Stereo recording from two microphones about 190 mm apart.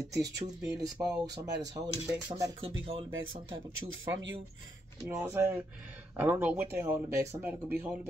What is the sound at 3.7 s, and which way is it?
Speech, 75° right (ahead or behind).